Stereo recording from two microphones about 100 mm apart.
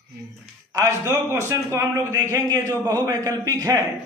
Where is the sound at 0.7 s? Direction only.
30° right (ahead or behind).